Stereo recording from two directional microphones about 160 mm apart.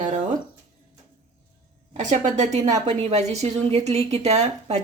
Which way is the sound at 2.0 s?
50° right (ahead or behind).